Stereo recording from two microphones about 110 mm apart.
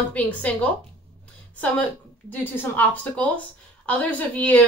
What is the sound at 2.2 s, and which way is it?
A woman's voice, 15° left (ahead or behind).